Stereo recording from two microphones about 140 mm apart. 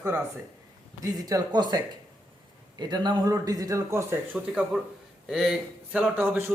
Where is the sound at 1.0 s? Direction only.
25° right (ahead or behind).